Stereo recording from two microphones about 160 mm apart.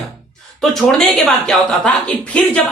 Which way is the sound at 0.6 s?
Centre (ahead or behind).